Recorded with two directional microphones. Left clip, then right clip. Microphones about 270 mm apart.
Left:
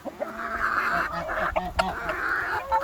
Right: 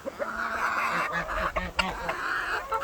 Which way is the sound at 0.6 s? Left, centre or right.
Centre.